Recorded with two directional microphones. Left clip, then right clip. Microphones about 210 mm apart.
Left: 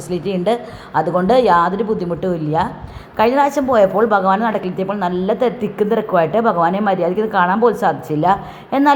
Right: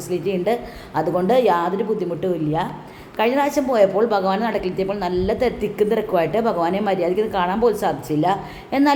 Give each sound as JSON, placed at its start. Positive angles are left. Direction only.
{"t": 0.1, "sound": "a woman's voice", "side_deg": 15}